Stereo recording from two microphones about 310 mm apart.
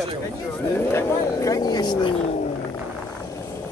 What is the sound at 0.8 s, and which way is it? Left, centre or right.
Speech, centre.